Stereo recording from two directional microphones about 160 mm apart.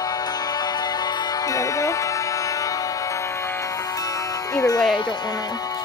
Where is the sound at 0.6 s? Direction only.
25° left (ahead or behind).